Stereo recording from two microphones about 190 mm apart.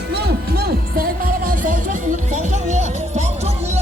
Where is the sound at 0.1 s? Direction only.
60° right (ahead or behind).